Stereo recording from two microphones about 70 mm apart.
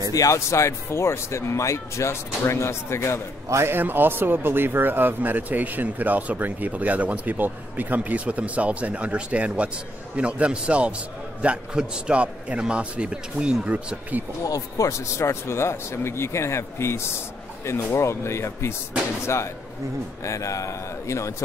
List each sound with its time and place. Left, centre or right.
0.1 s speech: left
3.4 s a man's voice: right
3.7 s a man's voice: right
14.4 s speech: left